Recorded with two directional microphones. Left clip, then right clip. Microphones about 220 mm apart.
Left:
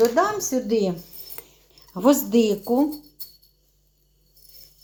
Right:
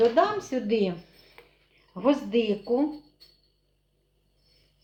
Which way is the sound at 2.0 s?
45° left (ahead or behind).